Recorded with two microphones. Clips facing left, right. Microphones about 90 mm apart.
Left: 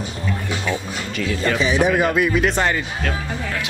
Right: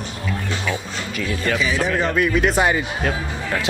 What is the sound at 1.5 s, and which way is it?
Speech, 20° left (ahead or behind).